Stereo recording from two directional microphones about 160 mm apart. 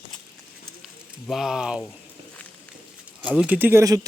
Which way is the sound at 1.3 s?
Centre (ahead or behind).